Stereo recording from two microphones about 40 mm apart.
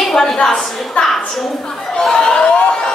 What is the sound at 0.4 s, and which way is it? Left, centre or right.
Speech, left.